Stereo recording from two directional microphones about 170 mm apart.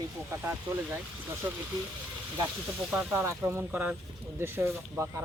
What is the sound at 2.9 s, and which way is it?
Speech, 10° right (ahead or behind).